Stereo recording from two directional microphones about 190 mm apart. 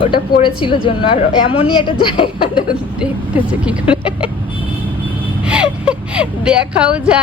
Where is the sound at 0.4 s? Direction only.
25° left (ahead or behind).